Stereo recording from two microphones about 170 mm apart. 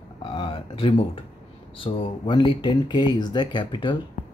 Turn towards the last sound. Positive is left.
turn(degrees=30)  # may be behind; listen again after turning